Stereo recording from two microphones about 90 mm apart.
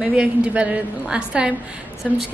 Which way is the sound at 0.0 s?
10° right (ahead or behind).